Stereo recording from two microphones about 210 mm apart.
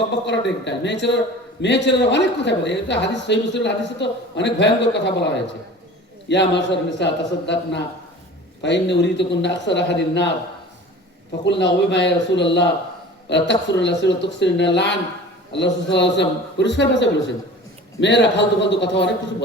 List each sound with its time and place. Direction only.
0.3 s speech: 55° left (ahead or behind)
11.4 s speech: 55° left (ahead or behind)